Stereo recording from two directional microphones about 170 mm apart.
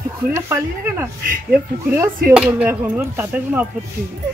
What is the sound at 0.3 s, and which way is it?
Speech, 15° right (ahead or behind).